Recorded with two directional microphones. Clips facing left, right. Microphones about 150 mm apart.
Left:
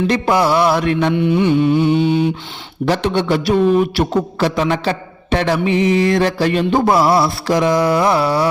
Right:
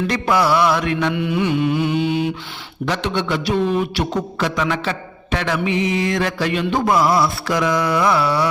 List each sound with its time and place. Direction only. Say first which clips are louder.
0.1 s music: left 1 dB; 30° left (ahead or behind)
2.8 s a man's voice: left 5 dB; 40° left (ahead or behind)